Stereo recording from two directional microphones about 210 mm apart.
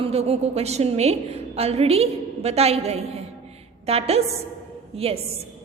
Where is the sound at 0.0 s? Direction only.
30° right (ahead or behind).